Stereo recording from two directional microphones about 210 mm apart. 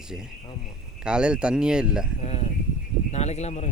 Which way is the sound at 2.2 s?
30° left (ahead or behind).